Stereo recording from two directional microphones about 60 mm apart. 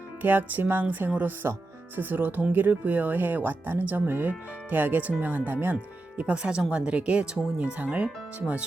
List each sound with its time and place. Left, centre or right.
0.2 s speech: right
6.1 s speech: centre